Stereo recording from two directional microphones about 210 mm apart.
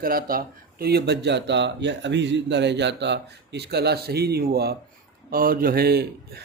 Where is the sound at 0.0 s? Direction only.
45° right (ahead or behind).